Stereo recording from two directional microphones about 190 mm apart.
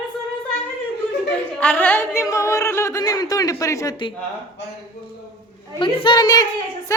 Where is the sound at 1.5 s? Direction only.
5° left (ahead or behind); by 4.1 s 20° left (ahead or behind).